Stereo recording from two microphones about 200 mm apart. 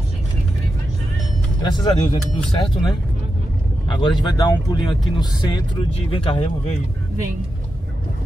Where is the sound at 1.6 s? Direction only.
20° left (ahead or behind).